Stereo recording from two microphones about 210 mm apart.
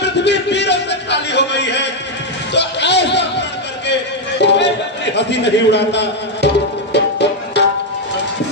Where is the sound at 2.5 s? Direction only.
55° left (ahead or behind).